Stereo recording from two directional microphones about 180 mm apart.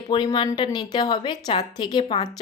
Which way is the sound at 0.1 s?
25° left (ahead or behind).